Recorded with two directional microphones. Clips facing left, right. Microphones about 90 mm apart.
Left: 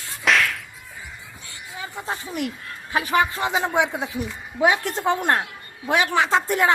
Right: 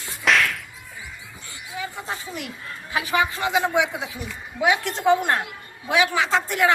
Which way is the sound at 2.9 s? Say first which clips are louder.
Left 2 dB; 45° left (ahead or behind).